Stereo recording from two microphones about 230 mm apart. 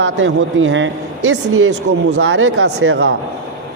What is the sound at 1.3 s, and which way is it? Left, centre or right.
Speech, right.